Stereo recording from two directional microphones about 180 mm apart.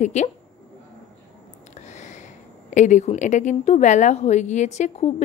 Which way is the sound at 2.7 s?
40° left (ahead or behind).